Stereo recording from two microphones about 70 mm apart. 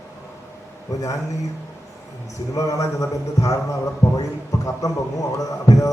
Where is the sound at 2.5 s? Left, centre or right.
Left.